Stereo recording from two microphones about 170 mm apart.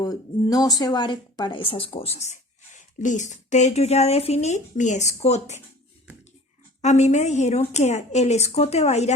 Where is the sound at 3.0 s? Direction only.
45° left (ahead or behind).